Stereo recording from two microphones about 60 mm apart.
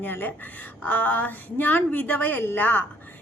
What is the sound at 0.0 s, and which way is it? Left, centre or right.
A woman's voice, left.